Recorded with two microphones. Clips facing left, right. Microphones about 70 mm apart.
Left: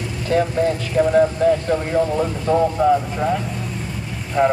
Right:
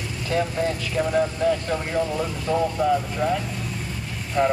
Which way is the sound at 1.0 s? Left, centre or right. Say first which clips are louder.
Left 8 dB; left.